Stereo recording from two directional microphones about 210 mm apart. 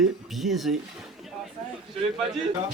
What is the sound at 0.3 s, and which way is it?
Speech, centre (ahead or behind).